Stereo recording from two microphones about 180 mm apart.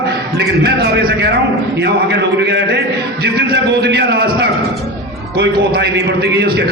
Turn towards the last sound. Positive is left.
turn(degrees=-65)  # may be behind; listen again after turning